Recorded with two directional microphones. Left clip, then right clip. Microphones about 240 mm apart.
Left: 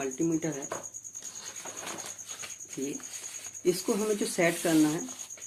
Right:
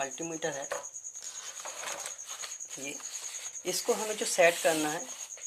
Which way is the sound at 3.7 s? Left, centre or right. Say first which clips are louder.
Left 3 dB; right.